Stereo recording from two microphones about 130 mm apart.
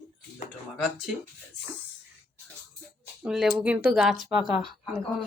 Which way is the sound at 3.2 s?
5° right (ahead or behind).